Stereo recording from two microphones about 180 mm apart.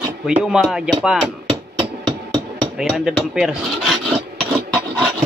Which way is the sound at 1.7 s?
30° right (ahead or behind).